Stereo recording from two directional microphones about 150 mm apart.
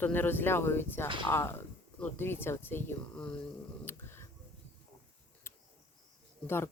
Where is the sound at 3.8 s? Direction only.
15° left (ahead or behind).